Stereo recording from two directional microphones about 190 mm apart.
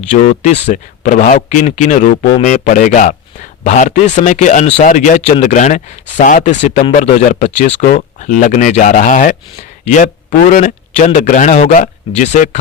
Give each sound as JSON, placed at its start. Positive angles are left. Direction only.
{"t": 0.1, "sound": "speech", "side_deg": 40}